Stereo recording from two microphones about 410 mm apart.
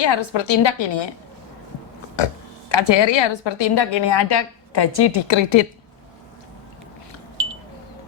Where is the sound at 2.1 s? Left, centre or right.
Left.